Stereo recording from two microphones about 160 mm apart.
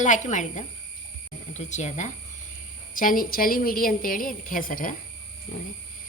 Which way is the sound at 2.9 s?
60° left (ahead or behind).